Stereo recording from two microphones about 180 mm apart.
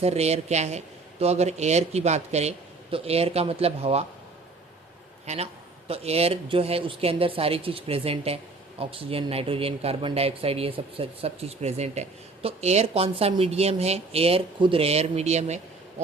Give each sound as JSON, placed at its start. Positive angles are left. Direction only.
{"t": 0.0, "sound": "speech", "side_deg": -35}
{"t": 5.2, "sound": "a man's voice", "side_deg": -35}